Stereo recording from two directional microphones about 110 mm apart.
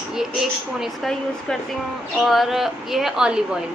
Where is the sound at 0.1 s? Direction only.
5° right (ahead or behind).